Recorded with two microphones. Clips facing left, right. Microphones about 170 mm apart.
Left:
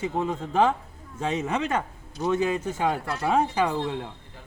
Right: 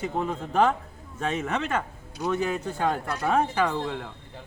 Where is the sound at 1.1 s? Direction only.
20° left (ahead or behind).